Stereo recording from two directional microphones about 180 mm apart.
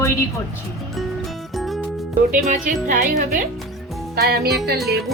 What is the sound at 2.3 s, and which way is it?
Speech, 45° right (ahead or behind).